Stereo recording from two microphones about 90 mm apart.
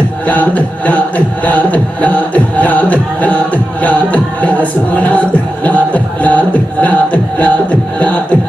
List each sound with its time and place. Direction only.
0.3 s music: 20° left (ahead or behind)
8.0 s beatboxing: 15° left (ahead or behind)